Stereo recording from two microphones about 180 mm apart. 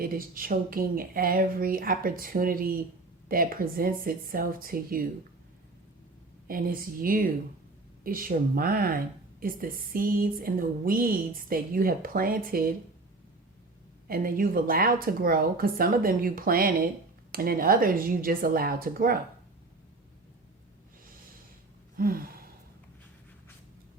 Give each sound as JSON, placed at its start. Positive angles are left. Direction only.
{"t": 0.0, "sound": "speech", "side_deg": -55}
{"t": 6.5, "sound": "speech", "side_deg": -50}
{"t": 14.1, "sound": "speech", "side_deg": -50}
{"t": 21.9, "sound": "gasp", "side_deg": -55}